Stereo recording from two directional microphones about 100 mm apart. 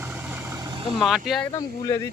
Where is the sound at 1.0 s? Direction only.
Centre (ahead or behind).